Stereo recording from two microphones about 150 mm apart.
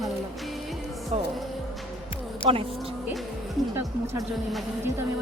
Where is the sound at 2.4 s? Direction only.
40° right (ahead or behind).